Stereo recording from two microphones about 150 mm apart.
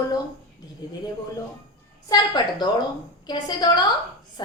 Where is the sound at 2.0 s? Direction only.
25° left (ahead or behind).